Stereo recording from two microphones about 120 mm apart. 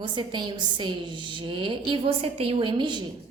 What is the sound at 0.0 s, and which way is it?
A woman's voice, 40° right (ahead or behind).